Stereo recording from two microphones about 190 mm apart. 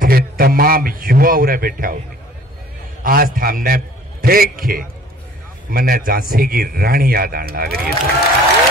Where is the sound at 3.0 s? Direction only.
50° right (ahead or behind).